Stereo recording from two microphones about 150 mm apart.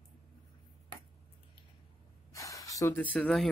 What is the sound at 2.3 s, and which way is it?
Gasp, 20° left (ahead or behind).